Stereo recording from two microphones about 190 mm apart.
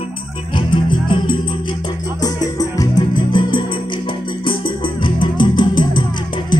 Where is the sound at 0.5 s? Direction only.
25° left (ahead or behind).